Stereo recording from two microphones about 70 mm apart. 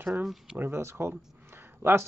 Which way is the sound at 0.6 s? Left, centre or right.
Right.